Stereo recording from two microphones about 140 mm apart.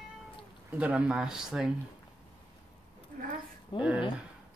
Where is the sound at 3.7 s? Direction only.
10° right (ahead or behind).